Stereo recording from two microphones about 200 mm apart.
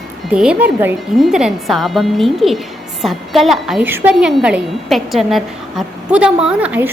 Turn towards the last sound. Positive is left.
turn(degrees=-10)  # may be behind; listen again after turning